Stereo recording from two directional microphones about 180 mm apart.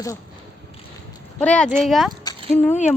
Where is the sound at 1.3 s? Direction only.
5° left (ahead or behind).